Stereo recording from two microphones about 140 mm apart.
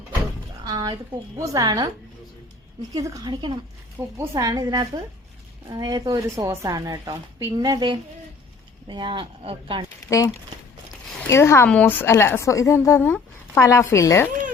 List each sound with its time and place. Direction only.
0.6 s a sound: 30° right (ahead or behind)
1.4 s speech: 25° right (ahead or behind)
2.9 s speech: 25° right (ahead or behind)
4.0 s a woman's voice: 15° right (ahead or behind); by 9.8 s 40° right (ahead or behind)
10.1 s a woman's voice: 20° left (ahead or behind)
13.0 s a woman's voice: 10° left (ahead or behind)
13.6 s a woman's voice: 20° left (ahead or behind)